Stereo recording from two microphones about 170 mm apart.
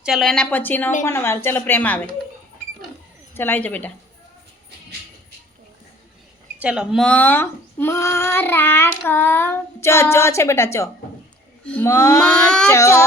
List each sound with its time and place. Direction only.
0.0 s a woman's voice: centre (ahead or behind)
3.3 s speech: 10° left (ahead or behind)
6.6 s speech: 5° right (ahead or behind); by 13.1 s 15° left (ahead or behind)